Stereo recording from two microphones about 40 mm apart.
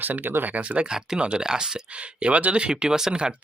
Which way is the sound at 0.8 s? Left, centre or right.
Right.